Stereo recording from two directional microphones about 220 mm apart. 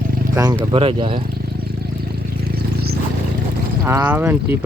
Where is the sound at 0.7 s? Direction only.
25° right (ahead or behind).